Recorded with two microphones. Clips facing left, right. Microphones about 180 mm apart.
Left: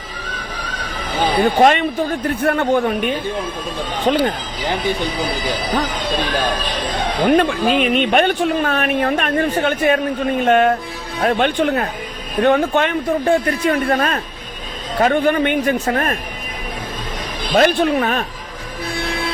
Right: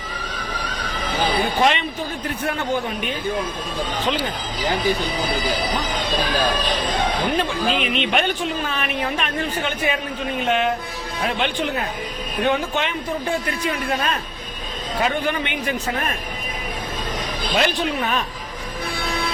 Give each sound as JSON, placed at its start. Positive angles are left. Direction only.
{"t": 1.4, "sound": "a man's voice", "side_deg": 50}
{"t": 7.2, "sound": "a man's voice", "side_deg": 55}
{"t": 17.5, "sound": "speech", "side_deg": 50}